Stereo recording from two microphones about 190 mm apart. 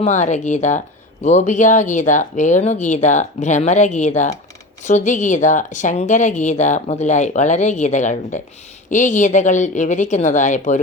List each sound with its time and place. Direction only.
0.0 s speech: 40° left (ahead or behind)